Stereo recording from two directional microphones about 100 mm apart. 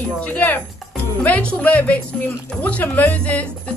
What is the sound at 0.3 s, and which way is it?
A woman's voice, 15° left (ahead or behind).